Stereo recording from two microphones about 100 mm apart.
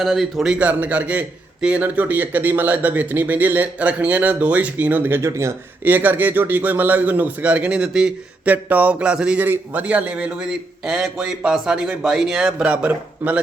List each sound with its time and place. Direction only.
0.0 s a man's voice: centre (ahead or behind); by 5.5 s 30° right (ahead or behind)
5.8 s a man's voice: 20° right (ahead or behind)